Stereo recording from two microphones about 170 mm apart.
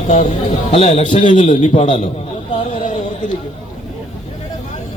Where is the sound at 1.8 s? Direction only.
35° left (ahead or behind).